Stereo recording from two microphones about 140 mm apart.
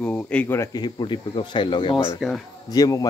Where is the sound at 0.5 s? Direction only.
30° left (ahead or behind).